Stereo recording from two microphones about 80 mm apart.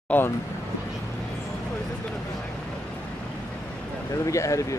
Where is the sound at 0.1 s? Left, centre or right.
Left.